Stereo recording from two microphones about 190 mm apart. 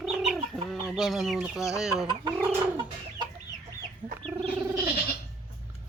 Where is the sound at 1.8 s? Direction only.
Centre (ahead or behind).